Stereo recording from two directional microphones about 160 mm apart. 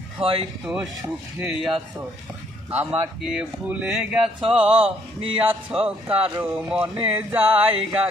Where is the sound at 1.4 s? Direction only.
5° right (ahead or behind).